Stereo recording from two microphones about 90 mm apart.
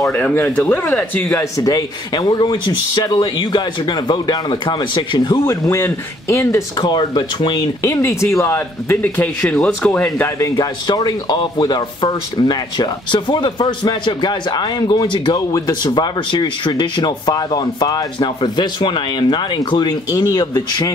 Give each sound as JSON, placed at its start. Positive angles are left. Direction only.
{"t": 0.1, "sound": "speech", "side_deg": 20}
{"t": 1.4, "sound": "a man's voice", "side_deg": 45}
{"t": 4.6, "sound": "a man's voice", "side_deg": 60}
{"t": 5.4, "sound": "speech", "side_deg": 30}
{"t": 6.8, "sound": "a man's voice", "side_deg": 60}
{"t": 7.9, "sound": "speech", "side_deg": 30}
{"t": 10.5, "sound": "a man's voice", "side_deg": 55}
{"t": 15.5, "sound": "speech", "side_deg": 45}
{"t": 15.9, "sound": "a man's voice", "side_deg": 60}
{"t": 20.1, "sound": "speech", "side_deg": 45}